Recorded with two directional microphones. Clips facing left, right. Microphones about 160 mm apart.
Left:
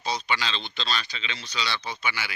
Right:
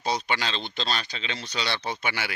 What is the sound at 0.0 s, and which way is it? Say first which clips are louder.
A man's voice: right 1 dB; 55° right (ahead or behind).